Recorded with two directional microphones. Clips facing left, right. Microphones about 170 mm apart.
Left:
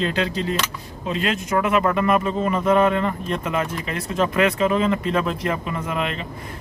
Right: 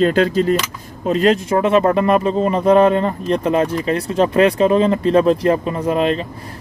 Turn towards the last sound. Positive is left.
turn(degrees=-35)  # may be behind; listen again after turning